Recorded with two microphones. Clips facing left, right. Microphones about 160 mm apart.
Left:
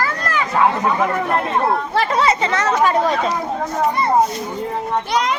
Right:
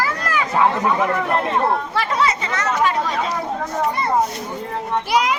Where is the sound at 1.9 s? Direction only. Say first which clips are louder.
Left 4 dB; 30° left (ahead or behind).